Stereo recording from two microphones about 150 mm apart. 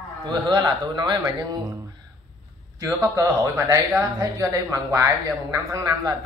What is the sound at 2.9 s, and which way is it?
Speech, 20° right (ahead or behind).